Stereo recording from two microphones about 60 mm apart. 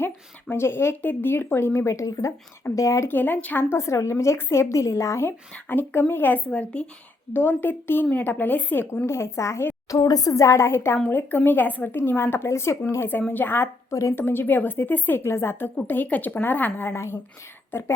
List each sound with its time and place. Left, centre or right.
0.5 s a woman's voice: left
2.7 s a woman's voice: left
3.1 s speech: left
3.6 s a woman's voice: left
5.2 s speech: left
6.5 s a woman's voice: centre
7.3 s speech: left
9.0 s a woman's voice: left
9.9 s a woman's voice: left
11.1 s speech: left
11.9 s a woman's voice: left
13.1 s speech: left
15.2 s a woman's voice: left
16.9 s a woman's voice: left